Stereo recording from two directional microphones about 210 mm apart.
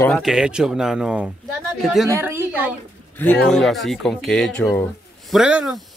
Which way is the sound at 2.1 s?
10° right (ahead or behind).